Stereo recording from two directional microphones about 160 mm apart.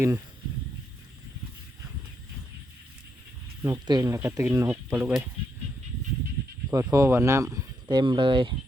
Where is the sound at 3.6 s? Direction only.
20° right (ahead or behind).